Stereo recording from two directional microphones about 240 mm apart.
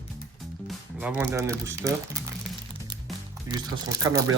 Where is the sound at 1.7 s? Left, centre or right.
Centre.